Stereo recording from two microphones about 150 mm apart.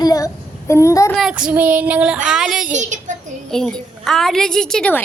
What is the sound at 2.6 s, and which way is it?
Speech, 55° right (ahead or behind).